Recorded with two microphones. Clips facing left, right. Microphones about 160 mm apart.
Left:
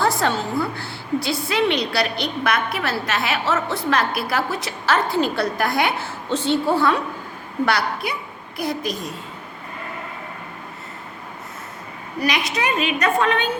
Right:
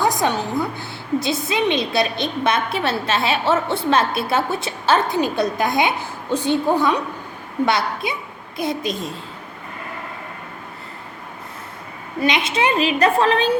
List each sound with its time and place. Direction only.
0.0 s a woman's voice: 15° right (ahead or behind)
12.2 s a woman's voice: 25° right (ahead or behind)